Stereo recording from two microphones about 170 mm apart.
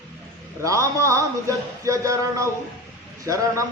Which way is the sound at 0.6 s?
20° right (ahead or behind).